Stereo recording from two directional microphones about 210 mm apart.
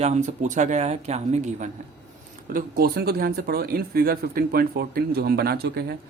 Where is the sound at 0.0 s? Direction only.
35° right (ahead or behind).